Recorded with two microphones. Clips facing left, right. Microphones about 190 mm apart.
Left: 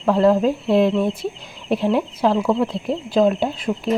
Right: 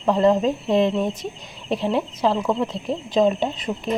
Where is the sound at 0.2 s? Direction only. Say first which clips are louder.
Left 3 dB; 5° left (ahead or behind).